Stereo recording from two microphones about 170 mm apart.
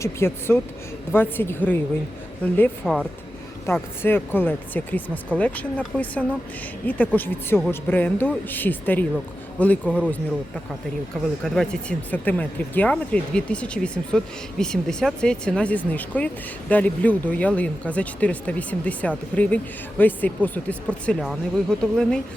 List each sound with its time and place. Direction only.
0.0 s speech: 15° left (ahead or behind)
2.8 s speech: centre (ahead or behind)
3.7 s speech: 15° left (ahead or behind)
11.4 s speech: 5° left (ahead or behind)